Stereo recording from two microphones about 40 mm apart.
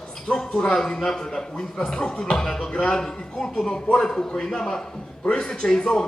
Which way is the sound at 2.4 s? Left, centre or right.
Centre.